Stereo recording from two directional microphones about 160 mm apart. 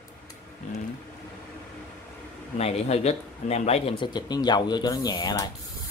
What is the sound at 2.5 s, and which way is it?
Speech, 40° left (ahead or behind).